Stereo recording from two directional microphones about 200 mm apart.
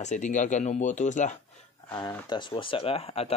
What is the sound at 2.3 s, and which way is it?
Speech, 25° left (ahead or behind).